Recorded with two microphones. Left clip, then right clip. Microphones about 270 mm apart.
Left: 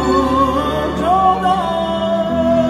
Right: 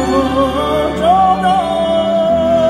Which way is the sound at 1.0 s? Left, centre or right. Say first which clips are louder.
Right 2 dB; right.